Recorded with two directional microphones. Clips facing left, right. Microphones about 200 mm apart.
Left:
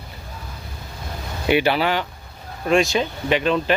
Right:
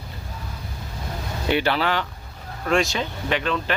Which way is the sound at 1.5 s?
10° left (ahead or behind).